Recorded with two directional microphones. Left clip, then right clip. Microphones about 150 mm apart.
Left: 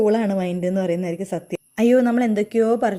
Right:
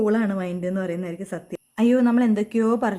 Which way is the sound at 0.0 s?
15° left (ahead or behind).